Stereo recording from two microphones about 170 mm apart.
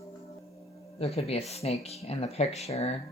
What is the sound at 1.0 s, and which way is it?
Speech, 35° left (ahead or behind).